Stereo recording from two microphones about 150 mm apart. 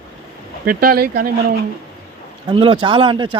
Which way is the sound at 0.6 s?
80° right.